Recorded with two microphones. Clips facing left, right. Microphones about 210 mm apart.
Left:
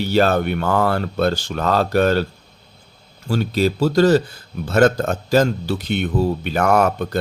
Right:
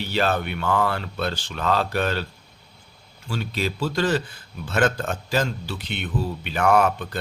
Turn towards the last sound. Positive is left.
turn(degrees=40)  # may be behind; listen again after turning